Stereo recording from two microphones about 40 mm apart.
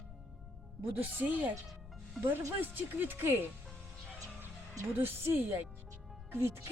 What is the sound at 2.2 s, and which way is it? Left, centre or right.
Speech, right.